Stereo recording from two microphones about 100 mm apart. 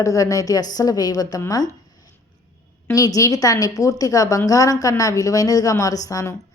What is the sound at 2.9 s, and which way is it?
A woman's voice, 35° left (ahead or behind).